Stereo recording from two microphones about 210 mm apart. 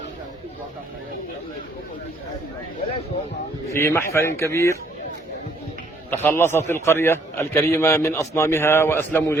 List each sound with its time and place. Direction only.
3.7 s a man's voice: 10° left (ahead or behind)
6.1 s a man's voice: 10° left (ahead or behind)